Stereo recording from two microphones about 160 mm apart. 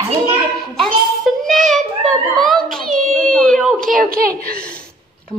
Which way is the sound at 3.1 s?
5° left (ahead or behind).